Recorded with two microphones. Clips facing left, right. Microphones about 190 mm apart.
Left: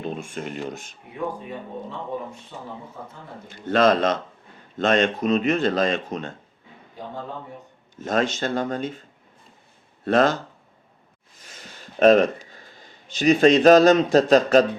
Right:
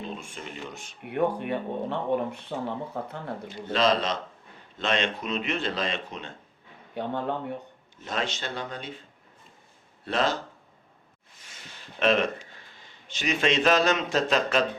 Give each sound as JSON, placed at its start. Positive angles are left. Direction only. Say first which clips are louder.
{"t": 0.0, "sound": "a sound", "louder": "left 7 dB", "side_deg": 50}
{"t": 0.6, "sound": "speech", "louder": "left 8 dB", "side_deg": 45}
{"t": 1.0, "sound": "speech", "louder": "right 5 dB", "side_deg": -70}
{"t": 3.5, "sound": "speech", "louder": "left 6 dB", "side_deg": 50}
{"t": 6.9, "sound": "speech", "louder": "right 5 dB", "side_deg": -70}
{"t": 8.0, "sound": "speech", "louder": "left 8 dB", "side_deg": 45}
{"t": 11.4, "sound": "speech", "louder": "left 4 dB", "side_deg": 40}